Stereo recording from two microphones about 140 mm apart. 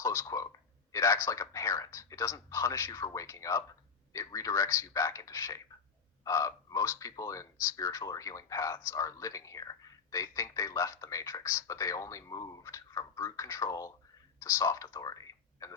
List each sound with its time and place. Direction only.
0.0 s speech: 20° left (ahead or behind)